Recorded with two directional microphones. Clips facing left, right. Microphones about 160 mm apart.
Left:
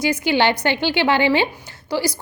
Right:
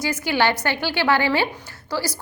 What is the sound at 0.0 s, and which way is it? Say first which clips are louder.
A woman's voice: left 3 dB; 20° left (ahead or behind).